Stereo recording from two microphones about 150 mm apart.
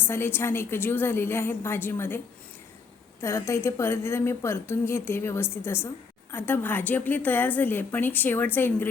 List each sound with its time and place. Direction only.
0.0 s a woman's voice: 15° left (ahead or behind)